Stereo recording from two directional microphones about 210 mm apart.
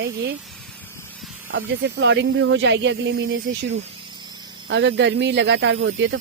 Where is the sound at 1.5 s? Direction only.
65° right (ahead or behind).